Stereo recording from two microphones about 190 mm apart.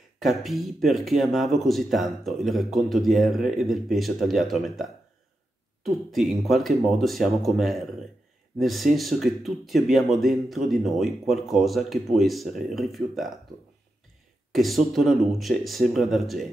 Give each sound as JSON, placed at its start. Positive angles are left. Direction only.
{"t": 0.2, "sound": "speech", "side_deg": 0}
{"t": 14.5, "sound": "speech", "side_deg": 0}